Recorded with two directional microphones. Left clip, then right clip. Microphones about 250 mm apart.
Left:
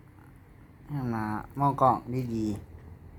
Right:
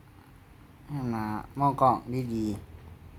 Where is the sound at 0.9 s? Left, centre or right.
Centre.